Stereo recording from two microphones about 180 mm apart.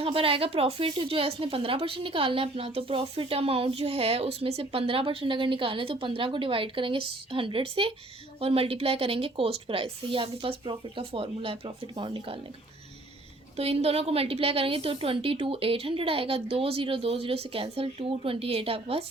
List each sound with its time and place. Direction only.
0.0 s speech: 30° right (ahead or behind)
13.6 s speech: 35° right (ahead or behind)